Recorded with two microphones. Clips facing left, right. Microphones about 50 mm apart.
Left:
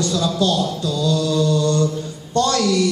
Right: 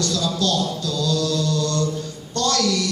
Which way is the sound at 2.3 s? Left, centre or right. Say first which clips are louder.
Left 4 dB; centre.